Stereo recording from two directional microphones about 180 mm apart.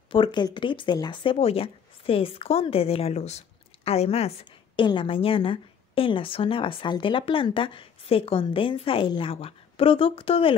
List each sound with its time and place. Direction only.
0.1 s speech: 25° left (ahead or behind)